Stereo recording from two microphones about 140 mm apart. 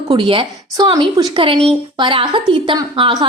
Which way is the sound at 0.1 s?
40° right (ahead or behind).